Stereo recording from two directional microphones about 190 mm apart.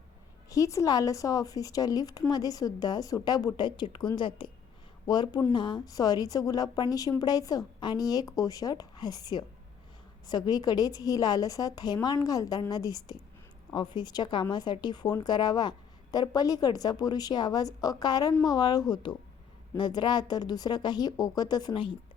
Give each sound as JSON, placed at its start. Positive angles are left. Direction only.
{"t": 0.5, "sound": "a woman's voice", "side_deg": 15}